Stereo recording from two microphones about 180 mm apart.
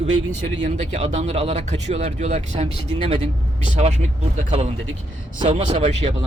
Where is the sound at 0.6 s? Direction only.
35° right (ahead or behind).